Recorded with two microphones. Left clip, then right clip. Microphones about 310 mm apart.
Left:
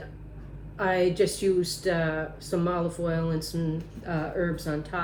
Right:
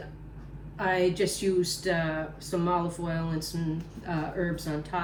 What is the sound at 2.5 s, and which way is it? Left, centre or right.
Speech, right.